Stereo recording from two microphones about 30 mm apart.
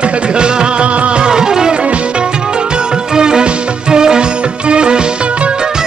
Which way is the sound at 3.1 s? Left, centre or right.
Right.